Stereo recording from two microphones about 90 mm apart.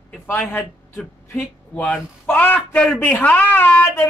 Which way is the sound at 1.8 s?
15° left (ahead or behind).